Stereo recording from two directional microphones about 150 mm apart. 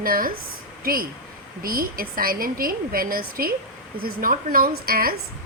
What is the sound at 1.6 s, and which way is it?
A woman's voice, 75° right (ahead or behind).